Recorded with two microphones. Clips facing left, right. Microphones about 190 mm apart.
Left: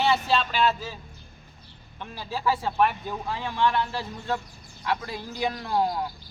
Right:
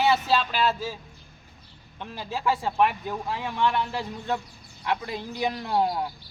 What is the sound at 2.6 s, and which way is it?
Speech, 5° right (ahead or behind).